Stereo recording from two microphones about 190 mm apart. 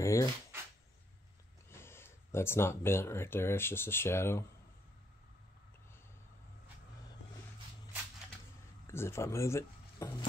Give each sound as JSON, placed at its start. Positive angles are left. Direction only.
{"t": 0.0, "sound": "speech", "side_deg": 15}
{"t": 1.7, "sound": "speech", "side_deg": 15}
{"t": 8.8, "sound": "speech", "side_deg": 15}